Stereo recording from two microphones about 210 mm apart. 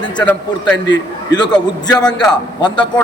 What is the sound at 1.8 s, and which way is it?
Speech, 20° left (ahead or behind).